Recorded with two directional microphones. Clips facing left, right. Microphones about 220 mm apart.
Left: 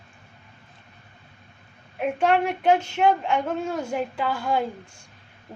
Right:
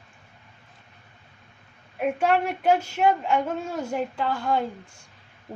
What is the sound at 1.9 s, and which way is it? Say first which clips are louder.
Speech: left 1 dB; 5° right (ahead or behind).